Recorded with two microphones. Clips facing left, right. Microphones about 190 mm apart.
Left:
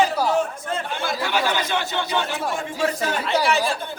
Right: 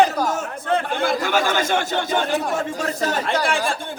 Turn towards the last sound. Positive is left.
turn(degrees=-50)  # may be behind; listen again after turning